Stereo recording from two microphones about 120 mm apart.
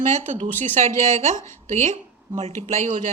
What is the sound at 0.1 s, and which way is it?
Speech, 90° right.